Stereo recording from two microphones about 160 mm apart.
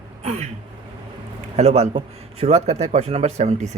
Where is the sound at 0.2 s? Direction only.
40° right (ahead or behind).